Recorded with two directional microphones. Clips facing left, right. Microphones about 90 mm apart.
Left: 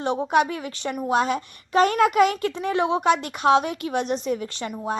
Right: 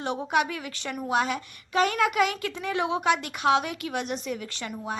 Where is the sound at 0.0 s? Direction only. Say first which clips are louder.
Left 5 dB; 30° left (ahead or behind).